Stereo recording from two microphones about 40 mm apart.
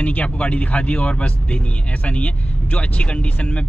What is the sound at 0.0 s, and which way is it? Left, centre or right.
Speech, left.